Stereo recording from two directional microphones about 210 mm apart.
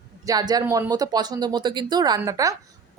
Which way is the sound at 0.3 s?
20° right (ahead or behind).